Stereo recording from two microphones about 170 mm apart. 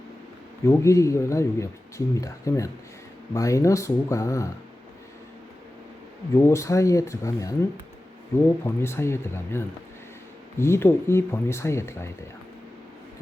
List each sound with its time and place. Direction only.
0.7 s speech: 15° left (ahead or behind)
6.3 s speech: 15° left (ahead or behind)
8.6 s speech: 15° left (ahead or behind)